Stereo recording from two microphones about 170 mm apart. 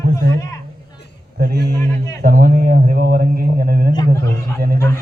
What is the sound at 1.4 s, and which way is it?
Speech, 70° right (ahead or behind).